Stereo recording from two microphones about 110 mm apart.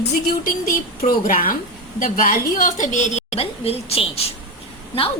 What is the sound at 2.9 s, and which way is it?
A woman's voice, 90° left.